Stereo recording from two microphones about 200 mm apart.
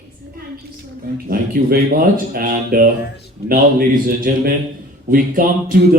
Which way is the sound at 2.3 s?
45° right (ahead or behind).